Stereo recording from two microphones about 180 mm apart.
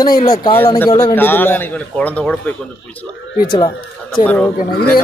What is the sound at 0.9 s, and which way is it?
A man's voice, 15° left (ahead or behind).